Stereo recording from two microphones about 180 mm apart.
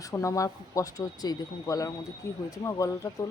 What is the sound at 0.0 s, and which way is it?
Speech, 15° left (ahead or behind).